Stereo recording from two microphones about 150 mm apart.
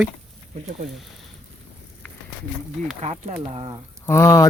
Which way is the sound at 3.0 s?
50° right (ahead or behind).